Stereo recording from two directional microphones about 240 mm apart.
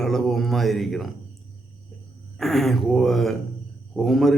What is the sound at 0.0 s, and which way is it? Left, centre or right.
Speech, centre.